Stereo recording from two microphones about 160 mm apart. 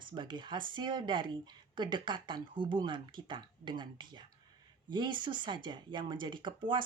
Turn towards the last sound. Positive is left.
turn(degrees=-30)  # may be behind; listen again after turning